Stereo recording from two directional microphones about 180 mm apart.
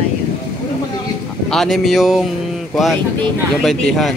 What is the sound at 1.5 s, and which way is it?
Speech, centre (ahead or behind).